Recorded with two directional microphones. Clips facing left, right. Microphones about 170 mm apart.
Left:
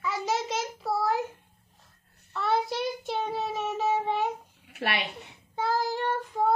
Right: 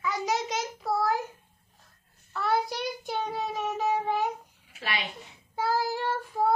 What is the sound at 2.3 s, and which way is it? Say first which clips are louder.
Child singing: even; centre (ahead or behind).